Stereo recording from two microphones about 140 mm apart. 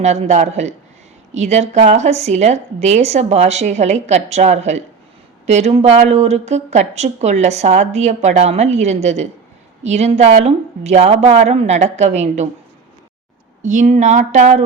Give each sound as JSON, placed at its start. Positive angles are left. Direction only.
{"t": 0.0, "sound": "a woman's voice", "side_deg": -55}
{"t": 13.6, "sound": "speech", "side_deg": -60}